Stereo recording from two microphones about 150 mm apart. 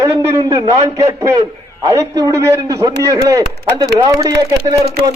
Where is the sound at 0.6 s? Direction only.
20° right (ahead or behind).